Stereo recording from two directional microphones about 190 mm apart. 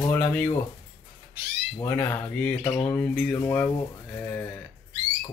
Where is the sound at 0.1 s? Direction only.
10° left (ahead or behind).